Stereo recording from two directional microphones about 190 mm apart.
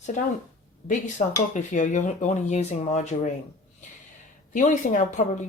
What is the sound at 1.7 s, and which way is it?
Speech, 40° left (ahead or behind).